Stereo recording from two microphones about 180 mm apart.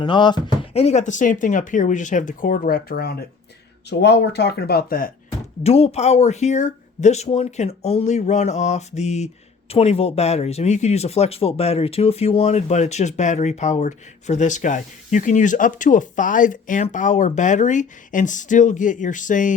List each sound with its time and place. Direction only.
0.0 s speech: 25° left (ahead or behind); by 5.1 s 55° left (ahead or behind)
5.6 s speech: 35° left (ahead or behind)